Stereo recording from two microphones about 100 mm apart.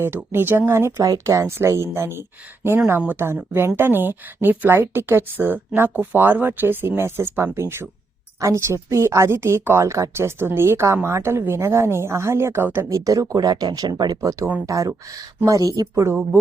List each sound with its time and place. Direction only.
0.3 s speech: 20° right (ahead or behind)
12.9 s speech: 35° right (ahead or behind)